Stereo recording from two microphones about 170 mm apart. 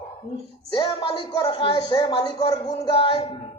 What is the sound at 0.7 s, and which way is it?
Speech, 30° left (ahead or behind).